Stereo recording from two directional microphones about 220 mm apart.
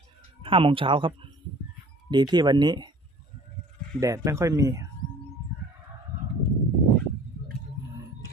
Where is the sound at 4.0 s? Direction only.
15° right (ahead or behind).